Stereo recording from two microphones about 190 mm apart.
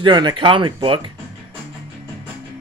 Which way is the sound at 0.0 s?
25° right (ahead or behind).